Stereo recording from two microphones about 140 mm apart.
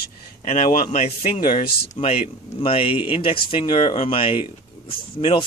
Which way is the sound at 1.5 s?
90° left.